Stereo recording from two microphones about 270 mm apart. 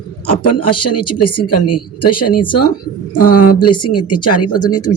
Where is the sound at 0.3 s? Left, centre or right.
Left.